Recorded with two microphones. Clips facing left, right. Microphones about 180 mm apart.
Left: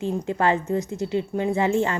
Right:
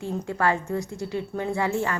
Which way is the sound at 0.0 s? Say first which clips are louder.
Left 3 dB; 20° left (ahead or behind).